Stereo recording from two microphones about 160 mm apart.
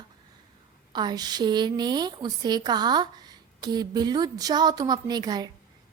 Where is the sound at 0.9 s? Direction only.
25° right (ahead or behind).